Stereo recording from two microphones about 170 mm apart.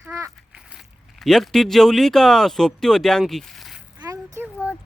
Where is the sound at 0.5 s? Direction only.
5° right (ahead or behind).